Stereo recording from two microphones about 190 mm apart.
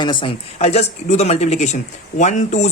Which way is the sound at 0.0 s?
25° left (ahead or behind).